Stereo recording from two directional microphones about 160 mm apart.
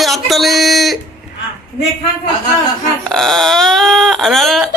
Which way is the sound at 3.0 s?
Centre (ahead or behind).